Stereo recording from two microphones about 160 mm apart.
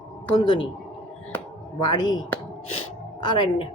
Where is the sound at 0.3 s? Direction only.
30° left (ahead or behind).